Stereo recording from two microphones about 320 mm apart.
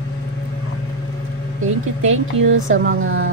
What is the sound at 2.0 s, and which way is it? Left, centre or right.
A woman's voice, right.